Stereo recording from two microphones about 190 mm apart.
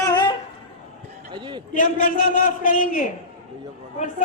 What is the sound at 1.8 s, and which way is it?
A man's voice, 45° left (ahead or behind).